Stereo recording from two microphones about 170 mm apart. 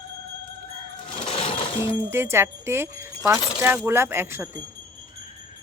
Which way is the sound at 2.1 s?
15° right (ahead or behind).